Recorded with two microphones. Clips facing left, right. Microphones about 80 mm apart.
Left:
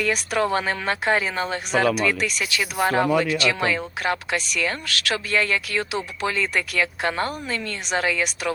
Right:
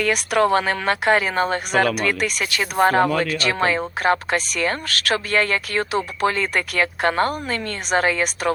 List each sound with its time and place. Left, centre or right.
0.0 s speech: right
1.4 s speech: right